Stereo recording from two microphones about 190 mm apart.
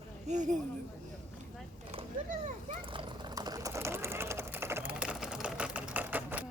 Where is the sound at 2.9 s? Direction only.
25° right (ahead or behind); by 6.5 s 5° right (ahead or behind).